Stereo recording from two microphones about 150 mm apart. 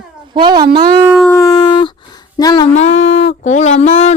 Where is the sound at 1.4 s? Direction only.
25° left (ahead or behind).